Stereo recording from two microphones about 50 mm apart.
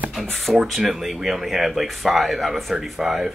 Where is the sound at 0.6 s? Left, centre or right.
Centre.